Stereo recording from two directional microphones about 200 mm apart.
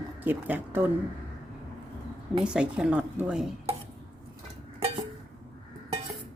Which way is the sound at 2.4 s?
5° right (ahead or behind).